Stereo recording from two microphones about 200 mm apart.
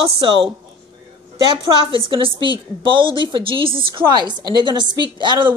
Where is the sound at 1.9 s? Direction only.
25° right (ahead or behind).